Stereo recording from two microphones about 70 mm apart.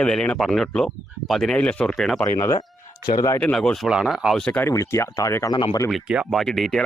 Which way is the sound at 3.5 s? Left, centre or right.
Centre.